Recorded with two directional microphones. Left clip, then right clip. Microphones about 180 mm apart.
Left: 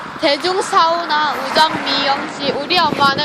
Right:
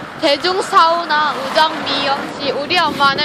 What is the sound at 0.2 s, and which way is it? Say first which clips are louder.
Speech: right 1 dB; 25° left (ahead or behind).